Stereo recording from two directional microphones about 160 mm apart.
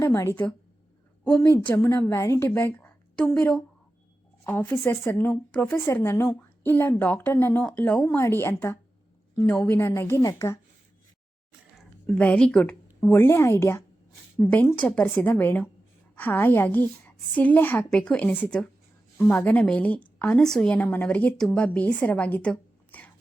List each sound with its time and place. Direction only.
0.0 s a woman's voice: 15° left (ahead or behind)
12.0 s a woman's voice: 10° left (ahead or behind)